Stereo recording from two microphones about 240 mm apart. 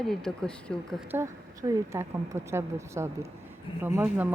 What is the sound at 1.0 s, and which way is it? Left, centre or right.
A woman's voice, centre.